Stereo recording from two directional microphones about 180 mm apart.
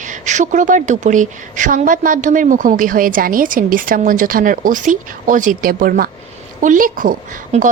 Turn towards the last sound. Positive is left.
turn(degrees=-50)  # may be behind; listen again after turning